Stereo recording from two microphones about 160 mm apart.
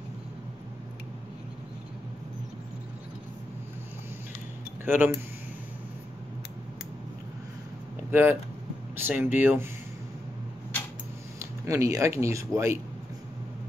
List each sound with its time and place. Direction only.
4.8 s speech: 10° right (ahead or behind)
8.1 s speech: 10° right (ahead or behind)
11.3 s speech: 20° right (ahead or behind)